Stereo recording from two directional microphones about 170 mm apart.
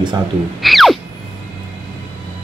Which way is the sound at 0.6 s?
Centre (ahead or behind).